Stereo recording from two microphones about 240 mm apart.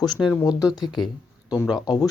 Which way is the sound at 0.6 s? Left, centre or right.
Centre.